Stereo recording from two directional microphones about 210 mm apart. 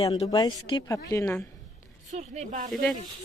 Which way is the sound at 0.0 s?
20° left (ahead or behind).